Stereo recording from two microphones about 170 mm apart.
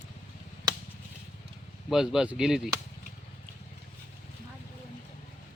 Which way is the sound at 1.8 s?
5° right (ahead or behind).